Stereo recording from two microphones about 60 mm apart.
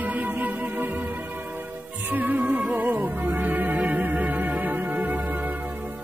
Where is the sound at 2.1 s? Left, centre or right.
Right.